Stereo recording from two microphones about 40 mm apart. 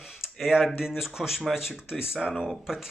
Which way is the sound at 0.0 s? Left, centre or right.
Centre.